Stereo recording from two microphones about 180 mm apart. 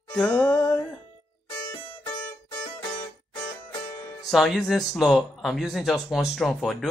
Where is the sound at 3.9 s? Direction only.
15° left (ahead or behind).